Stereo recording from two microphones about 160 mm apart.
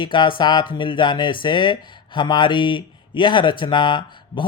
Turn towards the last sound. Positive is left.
turn(degrees=30)  # may be behind; listen again after turning